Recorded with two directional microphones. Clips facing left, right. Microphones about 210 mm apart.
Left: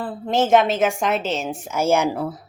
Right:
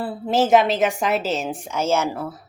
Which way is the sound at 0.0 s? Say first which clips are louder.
Right 1 dB; 5° right (ahead or behind).